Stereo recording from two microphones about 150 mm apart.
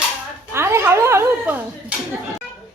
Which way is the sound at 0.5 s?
15° right (ahead or behind).